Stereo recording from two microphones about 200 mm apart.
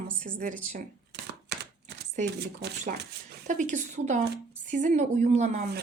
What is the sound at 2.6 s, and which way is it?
Speech, 55° right (ahead or behind).